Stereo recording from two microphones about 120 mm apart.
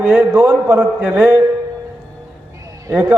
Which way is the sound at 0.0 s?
15° right (ahead or behind).